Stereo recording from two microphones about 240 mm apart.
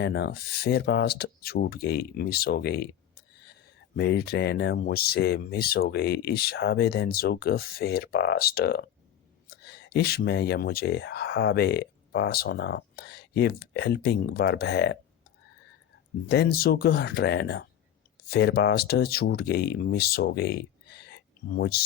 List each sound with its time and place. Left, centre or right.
0.0 s speech: left
3.9 s speech: left
16.3 s speech: left